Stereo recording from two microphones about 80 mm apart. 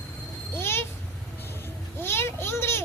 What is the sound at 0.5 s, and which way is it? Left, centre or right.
Speech, left.